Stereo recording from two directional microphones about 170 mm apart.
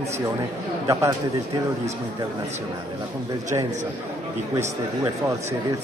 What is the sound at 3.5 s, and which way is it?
A man's voice, 25° right (ahead or behind).